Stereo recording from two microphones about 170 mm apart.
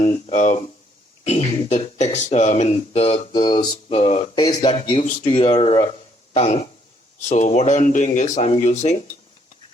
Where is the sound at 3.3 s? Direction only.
25° left (ahead or behind).